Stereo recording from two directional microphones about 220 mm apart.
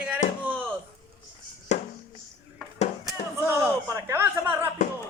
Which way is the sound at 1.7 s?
30° left (ahead or behind).